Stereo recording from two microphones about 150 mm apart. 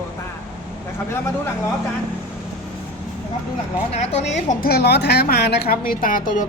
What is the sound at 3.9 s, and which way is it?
A woman's voice, 45° left (ahead or behind).